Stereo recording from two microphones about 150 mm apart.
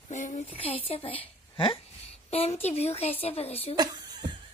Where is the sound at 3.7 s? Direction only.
25° right (ahead or behind).